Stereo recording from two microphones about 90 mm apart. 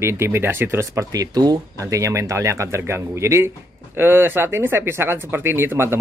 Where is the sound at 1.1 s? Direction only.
45° right (ahead or behind).